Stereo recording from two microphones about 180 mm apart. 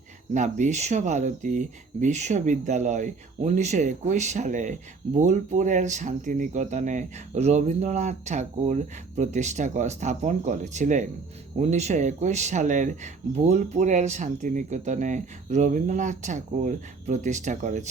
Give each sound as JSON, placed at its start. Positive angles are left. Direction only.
{"t": 0.3, "sound": "speech", "side_deg": -45}